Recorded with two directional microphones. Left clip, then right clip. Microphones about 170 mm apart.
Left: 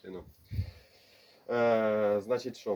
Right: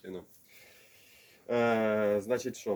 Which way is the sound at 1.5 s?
5° right (ahead or behind).